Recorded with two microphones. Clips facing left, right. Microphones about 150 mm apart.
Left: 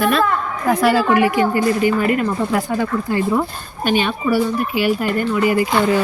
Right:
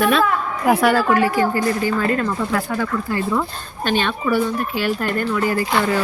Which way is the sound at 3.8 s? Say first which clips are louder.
Left 2 dB; 10° left (ahead or behind).